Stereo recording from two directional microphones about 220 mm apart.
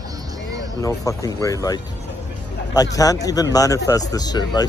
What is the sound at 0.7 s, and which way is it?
Speech, 15° left (ahead or behind).